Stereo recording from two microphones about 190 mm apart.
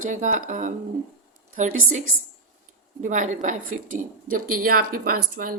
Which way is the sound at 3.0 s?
40° right (ahead or behind).